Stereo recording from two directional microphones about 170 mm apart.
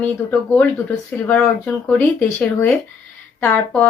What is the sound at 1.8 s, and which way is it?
A woman's voice, 10° left (ahead or behind).